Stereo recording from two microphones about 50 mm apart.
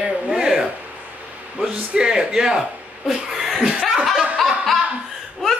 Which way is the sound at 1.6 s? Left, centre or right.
Centre.